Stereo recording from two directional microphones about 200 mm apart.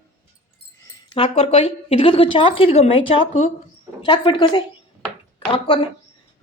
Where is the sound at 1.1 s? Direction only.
30° left (ahead or behind).